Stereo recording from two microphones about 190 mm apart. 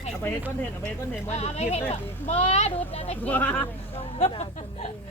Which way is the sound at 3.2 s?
10° left (ahead or behind).